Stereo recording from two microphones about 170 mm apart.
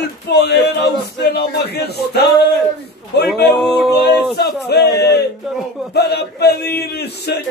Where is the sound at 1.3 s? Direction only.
75° left (ahead or behind).